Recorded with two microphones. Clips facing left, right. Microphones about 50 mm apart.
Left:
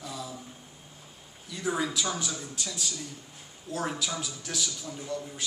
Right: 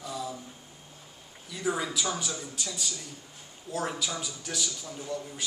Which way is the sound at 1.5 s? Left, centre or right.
Centre.